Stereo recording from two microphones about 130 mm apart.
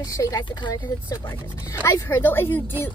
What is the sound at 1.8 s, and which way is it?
Speech, 20° left (ahead or behind).